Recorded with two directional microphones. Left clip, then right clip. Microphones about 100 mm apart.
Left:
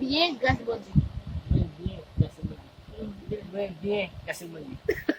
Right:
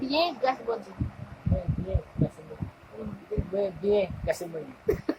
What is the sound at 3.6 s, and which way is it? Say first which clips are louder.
Speech: right 4 dB; 10° right (ahead or behind).